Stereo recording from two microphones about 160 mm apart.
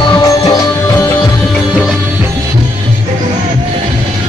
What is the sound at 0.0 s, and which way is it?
Music, 25° left (ahead or behind).